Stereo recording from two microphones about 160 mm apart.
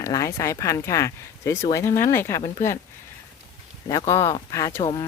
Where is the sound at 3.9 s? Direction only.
20° left (ahead or behind).